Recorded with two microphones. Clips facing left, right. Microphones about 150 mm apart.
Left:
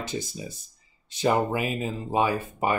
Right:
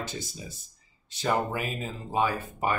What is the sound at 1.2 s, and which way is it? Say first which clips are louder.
Speech: left 4 dB; 15° left (ahead or behind).